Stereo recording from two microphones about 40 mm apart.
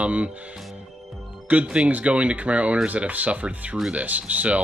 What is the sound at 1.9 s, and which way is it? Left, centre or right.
Speech, right.